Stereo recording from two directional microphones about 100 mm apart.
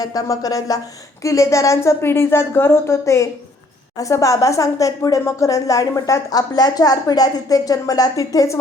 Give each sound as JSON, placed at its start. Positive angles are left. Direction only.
{"t": 0.0, "sound": "a woman's voice", "side_deg": 35}